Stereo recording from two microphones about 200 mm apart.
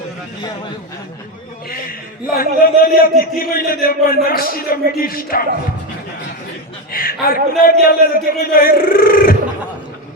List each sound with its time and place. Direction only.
2.4 s a man's voice: 45° left (ahead or behind)
6.9 s a man's voice: 45° left (ahead or behind)